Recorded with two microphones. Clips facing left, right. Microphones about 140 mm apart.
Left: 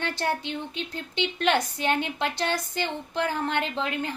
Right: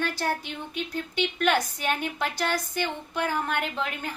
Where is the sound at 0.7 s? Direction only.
20° left (ahead or behind).